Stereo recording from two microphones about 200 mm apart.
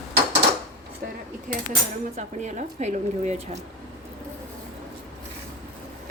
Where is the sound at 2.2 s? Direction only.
35° right (ahead or behind).